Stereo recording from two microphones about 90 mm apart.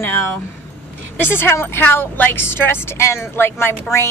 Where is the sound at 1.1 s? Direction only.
25° left (ahead or behind).